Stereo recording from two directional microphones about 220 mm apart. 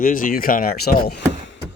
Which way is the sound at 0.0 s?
40° left (ahead or behind).